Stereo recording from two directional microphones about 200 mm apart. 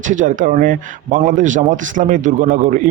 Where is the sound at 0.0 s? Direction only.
40° right (ahead or behind).